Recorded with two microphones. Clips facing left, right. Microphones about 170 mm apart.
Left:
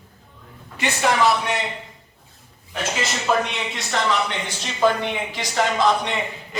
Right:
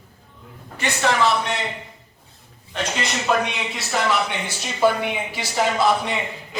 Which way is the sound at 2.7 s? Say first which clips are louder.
Even; centre (ahead or behind).